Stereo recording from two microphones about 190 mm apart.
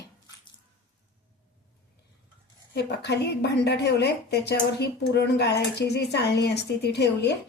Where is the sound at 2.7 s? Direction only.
65° left (ahead or behind).